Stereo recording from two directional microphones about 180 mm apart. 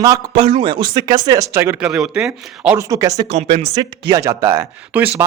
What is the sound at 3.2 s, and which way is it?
Speech, 35° right (ahead or behind).